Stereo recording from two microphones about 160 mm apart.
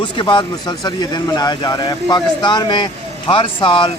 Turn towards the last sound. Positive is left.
turn(degrees=30)  # may be behind; listen again after turning